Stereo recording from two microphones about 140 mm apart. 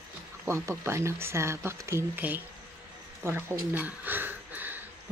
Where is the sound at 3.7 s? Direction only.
15° right (ahead or behind).